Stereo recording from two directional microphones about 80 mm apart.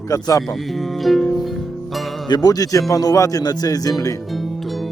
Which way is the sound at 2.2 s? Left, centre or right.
Left.